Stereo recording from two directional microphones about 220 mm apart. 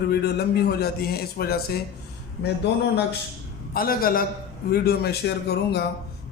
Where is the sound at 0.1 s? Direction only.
45° left (ahead or behind).